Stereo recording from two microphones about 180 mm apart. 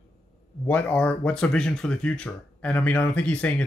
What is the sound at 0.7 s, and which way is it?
Speech, 5° left (ahead or behind).